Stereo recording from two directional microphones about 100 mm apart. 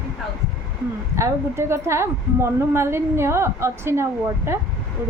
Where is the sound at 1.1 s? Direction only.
30° right (ahead or behind).